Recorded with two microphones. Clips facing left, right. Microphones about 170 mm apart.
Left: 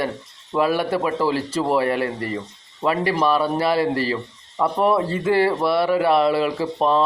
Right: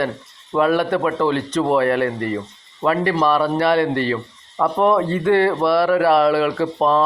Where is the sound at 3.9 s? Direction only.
35° left (ahead or behind).